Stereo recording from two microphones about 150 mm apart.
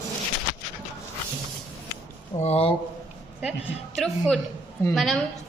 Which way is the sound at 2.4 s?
45° left (ahead or behind).